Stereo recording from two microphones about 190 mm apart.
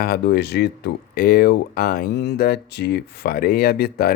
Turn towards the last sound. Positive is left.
turn(degrees=55)  # may be behind; listen again after turning